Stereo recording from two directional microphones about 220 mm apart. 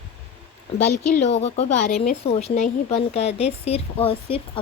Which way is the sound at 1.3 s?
30° left (ahead or behind).